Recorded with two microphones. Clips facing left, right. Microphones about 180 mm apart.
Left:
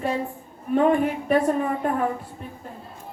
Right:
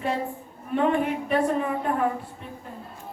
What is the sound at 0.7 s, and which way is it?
Speech, 40° left (ahead or behind).